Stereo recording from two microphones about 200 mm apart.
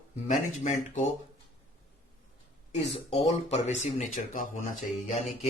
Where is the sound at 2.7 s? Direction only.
30° left (ahead or behind).